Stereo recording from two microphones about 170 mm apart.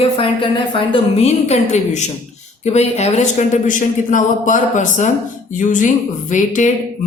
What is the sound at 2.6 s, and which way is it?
A woman's voice, 40° left (ahead or behind).